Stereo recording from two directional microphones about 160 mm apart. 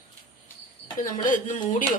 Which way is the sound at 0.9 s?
55° left (ahead or behind).